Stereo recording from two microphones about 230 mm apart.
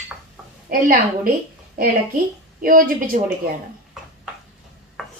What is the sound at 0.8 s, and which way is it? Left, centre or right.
A woman's voice, right.